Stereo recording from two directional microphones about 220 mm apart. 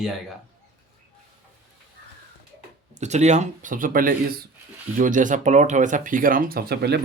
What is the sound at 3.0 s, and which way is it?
Speech, 30° right (ahead or behind).